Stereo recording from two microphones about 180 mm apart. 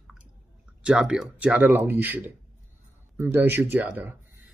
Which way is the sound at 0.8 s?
5° right (ahead or behind).